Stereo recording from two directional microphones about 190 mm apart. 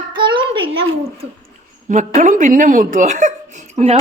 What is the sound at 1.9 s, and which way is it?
Speech, 40° right (ahead or behind).